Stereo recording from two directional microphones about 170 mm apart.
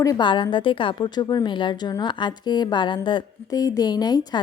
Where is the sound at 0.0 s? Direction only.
25° left (ahead or behind).